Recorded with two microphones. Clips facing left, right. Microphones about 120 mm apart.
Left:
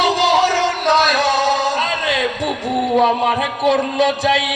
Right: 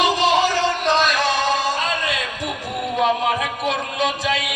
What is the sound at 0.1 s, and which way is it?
Music, 70° left (ahead or behind).